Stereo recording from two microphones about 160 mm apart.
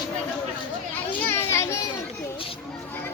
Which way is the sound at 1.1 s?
15° left (ahead or behind).